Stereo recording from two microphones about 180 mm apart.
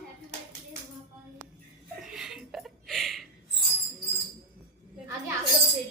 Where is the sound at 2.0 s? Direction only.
5° right (ahead or behind).